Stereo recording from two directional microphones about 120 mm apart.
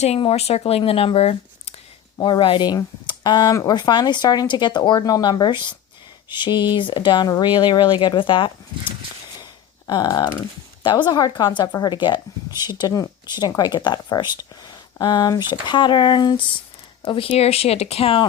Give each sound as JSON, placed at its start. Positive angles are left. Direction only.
{"t": 0.2, "sound": "speech", "side_deg": 55}
{"t": 2.1, "sound": "speech", "side_deg": 40}
{"t": 9.4, "sound": "a sound", "side_deg": 35}
{"t": 11.0, "sound": "speech", "side_deg": 35}